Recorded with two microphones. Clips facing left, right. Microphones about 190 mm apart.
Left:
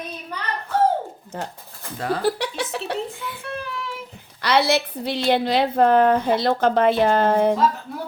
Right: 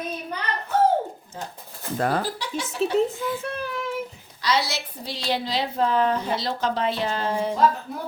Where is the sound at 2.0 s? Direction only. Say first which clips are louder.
Right 1 dB; 50° right (ahead or behind).